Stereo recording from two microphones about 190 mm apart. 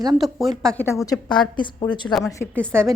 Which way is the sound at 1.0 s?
20° left (ahead or behind).